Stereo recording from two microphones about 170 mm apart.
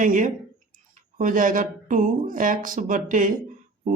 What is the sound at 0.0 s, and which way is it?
Speech, 50° right (ahead or behind).